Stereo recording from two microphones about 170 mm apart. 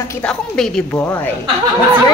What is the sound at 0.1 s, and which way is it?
Speech, 5° left (ahead or behind).